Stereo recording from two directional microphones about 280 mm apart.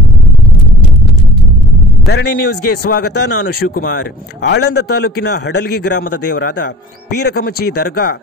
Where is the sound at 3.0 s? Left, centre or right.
Left.